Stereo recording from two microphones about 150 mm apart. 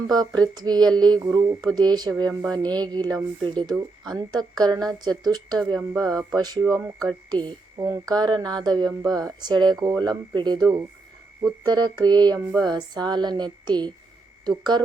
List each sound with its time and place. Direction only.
0.4 s speech: 25° right (ahead or behind)